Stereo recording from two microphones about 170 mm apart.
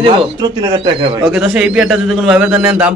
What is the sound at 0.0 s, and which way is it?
Speech, 30° right (ahead or behind).